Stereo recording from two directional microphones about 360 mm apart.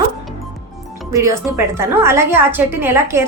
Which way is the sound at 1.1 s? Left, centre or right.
Centre.